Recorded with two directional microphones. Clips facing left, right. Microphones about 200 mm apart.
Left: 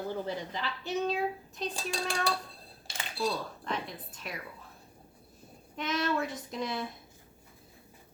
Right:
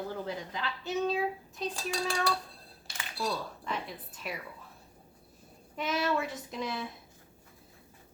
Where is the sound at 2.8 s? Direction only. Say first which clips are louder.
Left 3 dB; 25° left (ahead or behind).